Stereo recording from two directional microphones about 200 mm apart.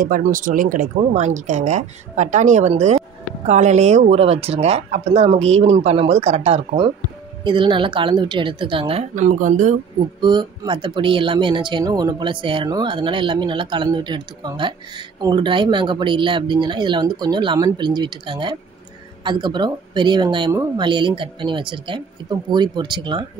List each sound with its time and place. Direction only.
0.0 s speech: 45° right (ahead or behind)
10.2 s speech: 20° right (ahead or behind)